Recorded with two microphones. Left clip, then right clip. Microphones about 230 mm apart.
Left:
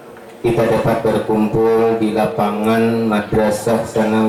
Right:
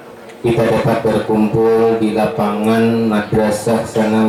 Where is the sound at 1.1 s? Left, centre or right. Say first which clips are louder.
Right 1 dB; centre.